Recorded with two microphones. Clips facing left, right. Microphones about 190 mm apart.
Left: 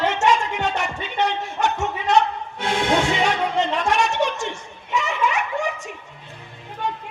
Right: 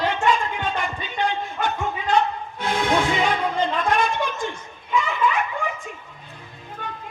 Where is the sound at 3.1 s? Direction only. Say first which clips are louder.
Left 1 dB; 75° left (ahead or behind).